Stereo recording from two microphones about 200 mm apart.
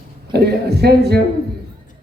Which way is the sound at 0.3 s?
55° right (ahead or behind).